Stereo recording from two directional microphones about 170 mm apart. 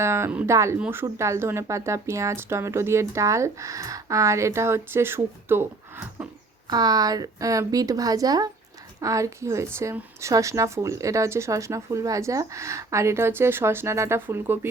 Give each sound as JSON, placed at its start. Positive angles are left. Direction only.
{"t": 0.0, "sound": "a woman's voice", "side_deg": -15}
{"t": 6.7, "sound": "a woman's voice", "side_deg": -25}